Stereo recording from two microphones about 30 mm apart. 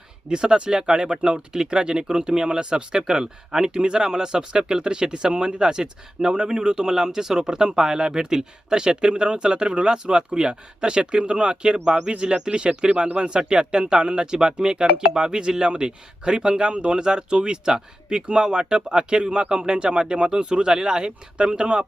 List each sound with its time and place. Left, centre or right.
0.3 s speech: right